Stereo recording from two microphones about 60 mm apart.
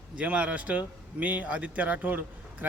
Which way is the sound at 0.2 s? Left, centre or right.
Right.